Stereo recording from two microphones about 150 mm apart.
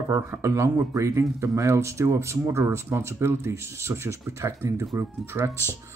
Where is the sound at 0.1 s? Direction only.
20° right (ahead or behind).